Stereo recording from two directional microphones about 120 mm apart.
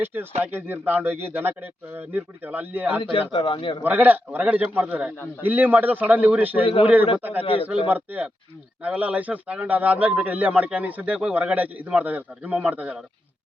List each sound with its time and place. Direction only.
0.0 s a man's voice: 15° right (ahead or behind)
3.0 s a man's voice: 45° left (ahead or behind)
3.8 s a man's voice: 15° right (ahead or behind)